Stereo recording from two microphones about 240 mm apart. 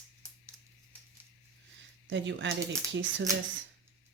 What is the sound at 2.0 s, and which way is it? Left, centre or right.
Speech, right.